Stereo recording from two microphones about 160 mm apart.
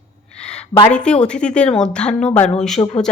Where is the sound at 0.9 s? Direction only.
5° left (ahead or behind).